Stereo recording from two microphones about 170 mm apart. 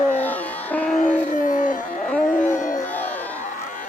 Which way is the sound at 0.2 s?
10° left (ahead or behind).